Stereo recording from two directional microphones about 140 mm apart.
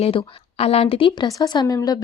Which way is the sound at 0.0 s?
45° left (ahead or behind).